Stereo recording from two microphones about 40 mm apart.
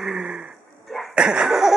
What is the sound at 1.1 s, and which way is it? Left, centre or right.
Laughter, right.